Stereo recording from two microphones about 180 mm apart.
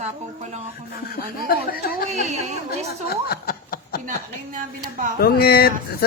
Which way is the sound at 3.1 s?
55° left (ahead or behind).